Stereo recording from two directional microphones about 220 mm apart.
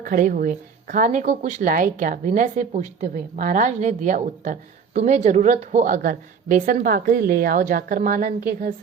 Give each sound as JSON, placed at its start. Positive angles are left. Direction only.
{"t": 0.0, "sound": "a woman's voice", "side_deg": -40}